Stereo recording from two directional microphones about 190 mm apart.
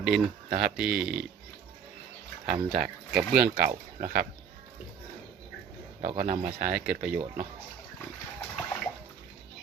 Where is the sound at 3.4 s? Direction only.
55° right (ahead or behind).